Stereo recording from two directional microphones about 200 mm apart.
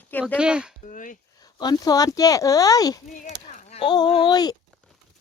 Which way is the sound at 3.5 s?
35° left (ahead or behind).